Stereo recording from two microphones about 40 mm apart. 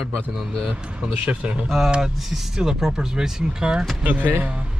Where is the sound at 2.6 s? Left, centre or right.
Centre.